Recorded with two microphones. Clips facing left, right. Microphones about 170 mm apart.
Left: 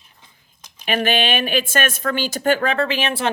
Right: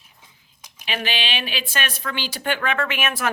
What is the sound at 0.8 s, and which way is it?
Speech, 50° left (ahead or behind).